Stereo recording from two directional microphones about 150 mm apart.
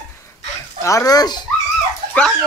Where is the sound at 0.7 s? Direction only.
20° left (ahead or behind).